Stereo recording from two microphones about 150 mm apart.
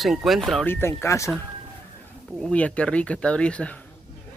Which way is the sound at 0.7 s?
15° left (ahead or behind).